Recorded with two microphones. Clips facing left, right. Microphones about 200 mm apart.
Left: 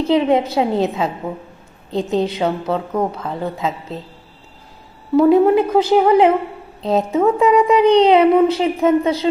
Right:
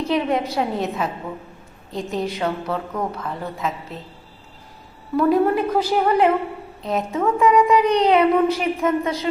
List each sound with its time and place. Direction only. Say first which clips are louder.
0.1 s a woman's voice: left 7 dB; 25° left (ahead or behind)
5.1 s a woman's voice: left 6 dB; 20° left (ahead or behind)